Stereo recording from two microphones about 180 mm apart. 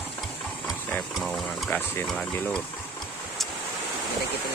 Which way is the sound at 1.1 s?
Centre (ahead or behind).